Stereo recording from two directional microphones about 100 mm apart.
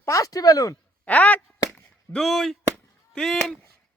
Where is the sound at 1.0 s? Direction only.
15° left (ahead or behind).